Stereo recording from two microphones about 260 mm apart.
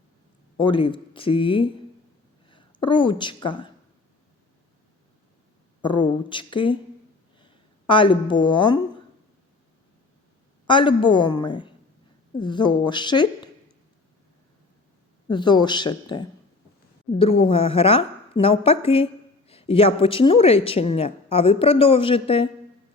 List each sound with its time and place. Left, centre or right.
0.6 s a woman's voice: centre
5.8 s a woman's voice: centre
10.7 s a woman's voice: centre
15.3 s a woman's voice: centre